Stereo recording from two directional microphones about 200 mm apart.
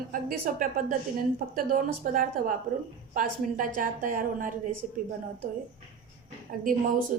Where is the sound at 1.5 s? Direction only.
40° right (ahead or behind).